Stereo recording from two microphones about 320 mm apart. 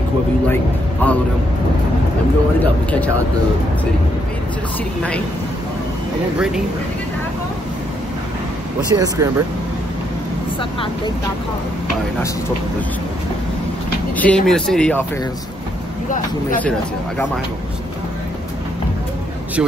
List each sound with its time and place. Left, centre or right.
1.0 s speech: centre
2.6 s speech: centre
8.9 s speech: centre
14.1 s speech: centre